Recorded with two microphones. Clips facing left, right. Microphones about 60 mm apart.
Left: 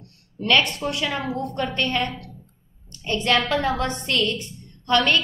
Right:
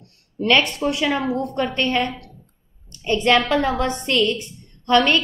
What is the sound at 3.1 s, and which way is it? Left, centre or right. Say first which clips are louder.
A woman's voice: right 4 dB; centre.